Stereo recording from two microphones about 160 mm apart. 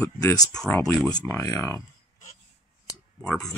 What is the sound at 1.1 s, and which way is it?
Speech, 20° left (ahead or behind).